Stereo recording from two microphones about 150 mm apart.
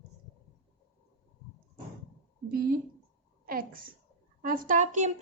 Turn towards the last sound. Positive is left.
turn(degrees=-55)  # may be behind; listen again after turning